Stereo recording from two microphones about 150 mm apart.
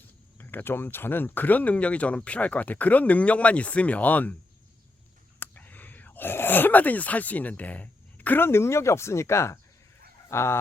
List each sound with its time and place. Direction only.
0.3 s speech: 15° left (ahead or behind)
5.4 s speech: 10° left (ahead or behind)